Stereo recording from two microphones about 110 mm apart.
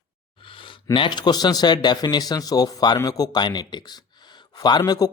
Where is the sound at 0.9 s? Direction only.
45° left (ahead or behind).